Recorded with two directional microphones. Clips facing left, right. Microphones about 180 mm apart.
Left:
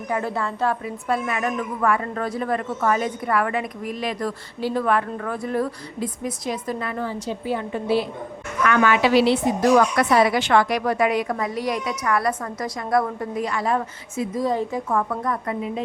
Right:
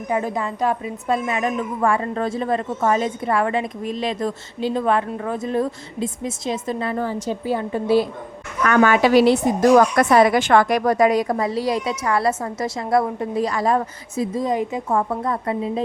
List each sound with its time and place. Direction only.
0.1 s a woman's voice: 15° right (ahead or behind)
7.0 s a woman's voice: 40° right (ahead or behind); by 13.4 s 25° right (ahead or behind)
13.4 s a woman's voice: 40° right (ahead or behind)
14.3 s a woman's voice: 20° right (ahead or behind)